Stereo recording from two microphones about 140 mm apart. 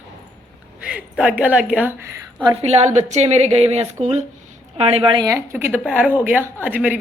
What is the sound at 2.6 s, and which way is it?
Speech, 50° right (ahead or behind).